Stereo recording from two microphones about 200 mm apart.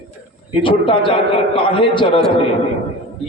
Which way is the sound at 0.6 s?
25° left (ahead or behind).